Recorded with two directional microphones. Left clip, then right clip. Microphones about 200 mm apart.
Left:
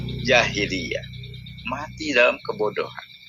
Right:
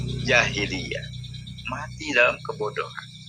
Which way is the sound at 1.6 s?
10° left (ahead or behind).